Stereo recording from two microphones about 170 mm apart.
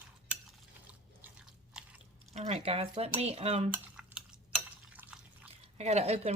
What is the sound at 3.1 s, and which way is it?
Cutlery, 35° right (ahead or behind).